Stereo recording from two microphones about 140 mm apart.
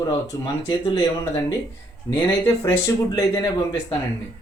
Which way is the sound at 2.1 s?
25° left (ahead or behind).